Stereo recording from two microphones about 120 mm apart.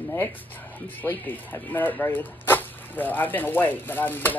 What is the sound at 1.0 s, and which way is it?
Speech, 20° left (ahead or behind).